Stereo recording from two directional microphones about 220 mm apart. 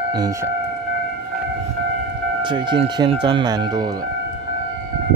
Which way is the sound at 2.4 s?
20° right (ahead or behind).